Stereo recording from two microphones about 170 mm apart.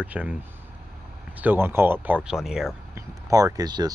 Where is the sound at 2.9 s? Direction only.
20° right (ahead or behind).